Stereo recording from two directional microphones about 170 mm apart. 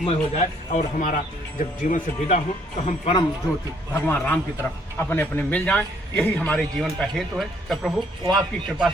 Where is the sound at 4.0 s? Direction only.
15° left (ahead or behind).